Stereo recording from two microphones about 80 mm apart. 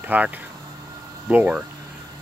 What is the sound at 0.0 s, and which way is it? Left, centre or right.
Speech, right.